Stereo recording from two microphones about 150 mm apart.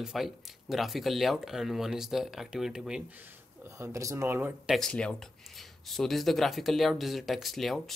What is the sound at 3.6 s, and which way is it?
Speech, 20° right (ahead or behind).